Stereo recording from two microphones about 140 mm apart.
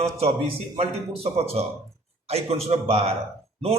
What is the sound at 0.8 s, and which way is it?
Speech, 45° right (ahead or behind).